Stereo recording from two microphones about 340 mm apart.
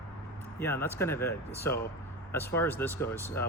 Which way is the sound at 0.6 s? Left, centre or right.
Centre.